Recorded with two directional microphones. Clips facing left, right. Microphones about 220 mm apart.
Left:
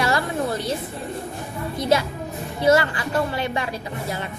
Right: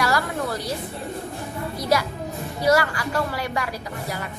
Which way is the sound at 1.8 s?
25° left (ahead or behind).